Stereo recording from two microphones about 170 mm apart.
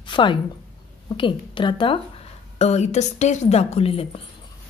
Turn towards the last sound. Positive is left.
turn(degrees=35)  # may be behind; listen again after turning